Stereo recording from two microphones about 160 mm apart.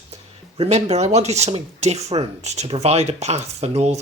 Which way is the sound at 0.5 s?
40° right (ahead or behind).